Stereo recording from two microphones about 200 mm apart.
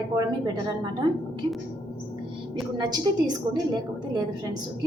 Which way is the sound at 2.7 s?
20° right (ahead or behind).